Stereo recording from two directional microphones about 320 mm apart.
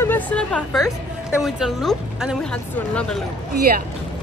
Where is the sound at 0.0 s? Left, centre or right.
Centre.